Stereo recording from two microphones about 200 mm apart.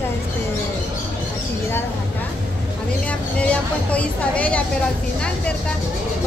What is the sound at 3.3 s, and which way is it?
A woman's voice, 5° left (ahead or behind).